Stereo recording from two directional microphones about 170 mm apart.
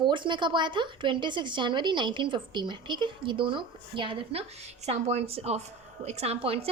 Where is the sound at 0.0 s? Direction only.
30° right (ahead or behind).